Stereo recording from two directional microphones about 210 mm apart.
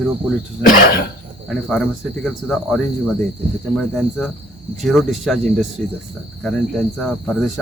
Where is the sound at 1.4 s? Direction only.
5° left (ahead or behind).